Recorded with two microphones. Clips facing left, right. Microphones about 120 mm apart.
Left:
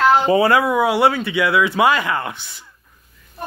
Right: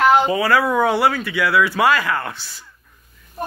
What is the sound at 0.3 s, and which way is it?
Speech, 25° left (ahead or behind).